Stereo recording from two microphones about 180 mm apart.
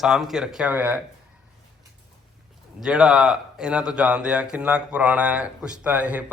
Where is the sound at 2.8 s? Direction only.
5° right (ahead or behind).